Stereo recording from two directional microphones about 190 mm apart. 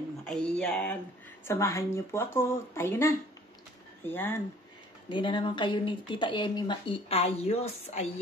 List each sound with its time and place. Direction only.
0.2 s speech: 5° left (ahead or behind)
1.4 s speech: 15° left (ahead or behind)
5.1 s speech: 25° left (ahead or behind)